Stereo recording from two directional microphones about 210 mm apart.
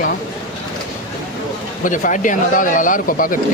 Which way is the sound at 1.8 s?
40° left (ahead or behind).